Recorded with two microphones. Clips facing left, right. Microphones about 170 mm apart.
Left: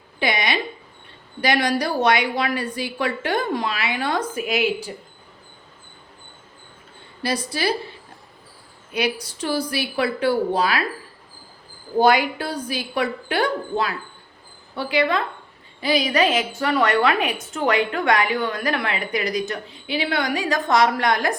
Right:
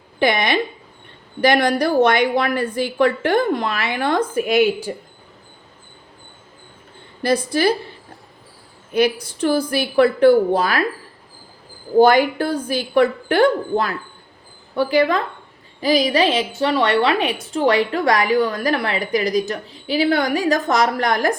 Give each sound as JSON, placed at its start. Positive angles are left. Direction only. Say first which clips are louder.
{"t": 0.2, "sound": "a woman's voice", "louder": "right 5 dB", "side_deg": -50}
{"t": 7.2, "sound": "a woman's voice", "louder": "right 7 dB", "side_deg": -50}
{"t": 8.9, "sound": "a woman's voice", "louder": "right 6 dB", "side_deg": -50}
{"t": 11.9, "sound": "a woman's voice", "louder": "right 5 dB", "side_deg": -45}